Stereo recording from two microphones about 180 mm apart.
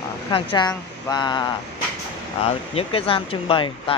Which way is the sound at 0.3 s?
25° left (ahead or behind).